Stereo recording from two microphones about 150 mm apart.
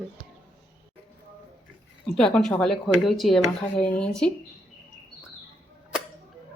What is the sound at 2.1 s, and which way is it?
Speech, 5° left (ahead or behind).